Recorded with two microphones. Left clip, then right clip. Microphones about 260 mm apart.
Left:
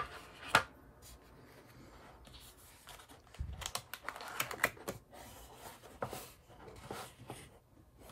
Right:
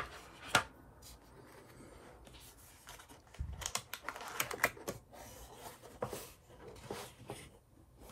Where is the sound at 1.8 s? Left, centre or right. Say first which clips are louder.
Right 1 dB; centre.